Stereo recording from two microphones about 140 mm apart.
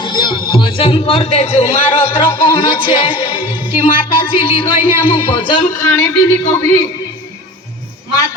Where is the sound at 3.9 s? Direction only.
40° left (ahead or behind).